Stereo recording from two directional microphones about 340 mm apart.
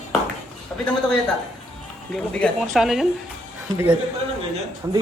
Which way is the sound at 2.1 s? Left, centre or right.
Centre.